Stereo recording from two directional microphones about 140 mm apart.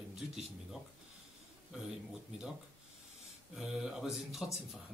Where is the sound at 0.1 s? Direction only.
5° right (ahead or behind).